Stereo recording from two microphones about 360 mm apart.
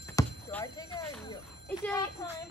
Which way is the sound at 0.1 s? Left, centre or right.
Centre.